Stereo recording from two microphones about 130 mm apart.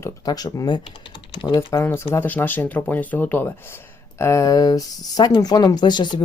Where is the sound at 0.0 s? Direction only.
25° left (ahead or behind).